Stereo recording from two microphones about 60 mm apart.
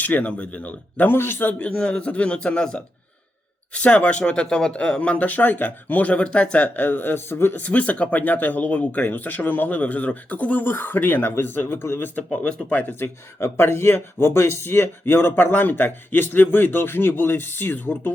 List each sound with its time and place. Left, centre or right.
0.0 s speech: left
1.5 s speech: left
7.3 s speech: left
7.5 s speech: left
13.4 s speech: left